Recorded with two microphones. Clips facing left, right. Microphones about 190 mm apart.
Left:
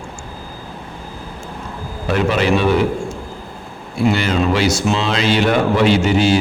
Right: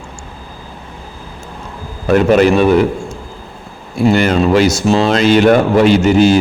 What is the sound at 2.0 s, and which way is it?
Speech, 45° right (ahead or behind).